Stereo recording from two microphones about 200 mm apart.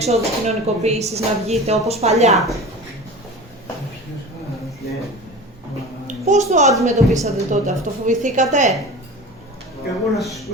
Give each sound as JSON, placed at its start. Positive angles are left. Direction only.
{"t": 0.0, "sound": "speech", "side_deg": -30}
{"t": 2.3, "sound": "a woman's voice", "side_deg": 0}
{"t": 6.1, "sound": "a child's voice", "side_deg": -35}
{"t": 10.2, "sound": "a woman's voice", "side_deg": 0}